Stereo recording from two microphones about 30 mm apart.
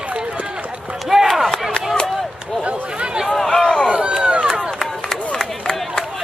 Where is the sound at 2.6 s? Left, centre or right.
Right.